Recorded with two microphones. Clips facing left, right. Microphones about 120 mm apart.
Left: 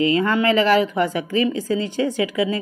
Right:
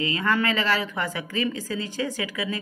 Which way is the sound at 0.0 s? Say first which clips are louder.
Left 7 dB; 30° left (ahead or behind).